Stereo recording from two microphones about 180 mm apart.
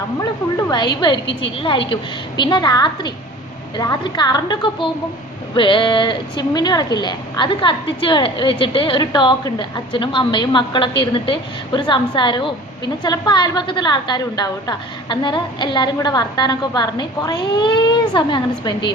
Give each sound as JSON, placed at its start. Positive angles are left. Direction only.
{"t": 1.3, "sound": "a woman's voice", "side_deg": 80}
{"t": 1.5, "sound": "a woman's voice", "side_deg": 30}